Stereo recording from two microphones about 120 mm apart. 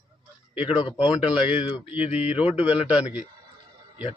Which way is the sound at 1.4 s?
40° left (ahead or behind).